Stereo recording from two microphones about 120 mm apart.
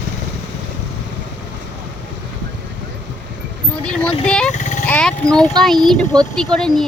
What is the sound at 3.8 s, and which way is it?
Speech, 5° left (ahead or behind).